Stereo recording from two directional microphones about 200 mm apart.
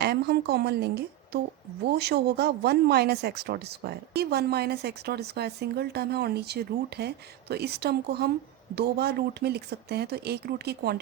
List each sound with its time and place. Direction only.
0.0 s a woman's voice: 55° right (ahead or behind)